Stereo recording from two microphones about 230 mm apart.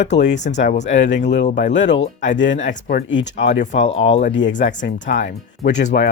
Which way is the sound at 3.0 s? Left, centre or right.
Left.